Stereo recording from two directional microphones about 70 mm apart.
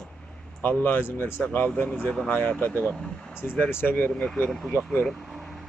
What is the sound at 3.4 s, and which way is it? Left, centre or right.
Speech, left.